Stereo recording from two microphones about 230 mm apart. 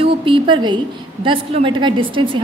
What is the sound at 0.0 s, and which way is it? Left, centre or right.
A woman's voice, right.